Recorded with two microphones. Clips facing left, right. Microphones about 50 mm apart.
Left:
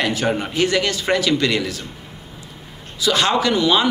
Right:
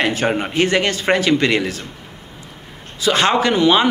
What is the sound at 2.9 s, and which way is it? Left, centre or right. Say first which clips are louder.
Speech: right 2 dB; right.